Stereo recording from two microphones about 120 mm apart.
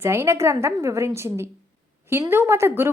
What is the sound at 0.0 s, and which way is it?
A woman's voice, 20° right (ahead or behind).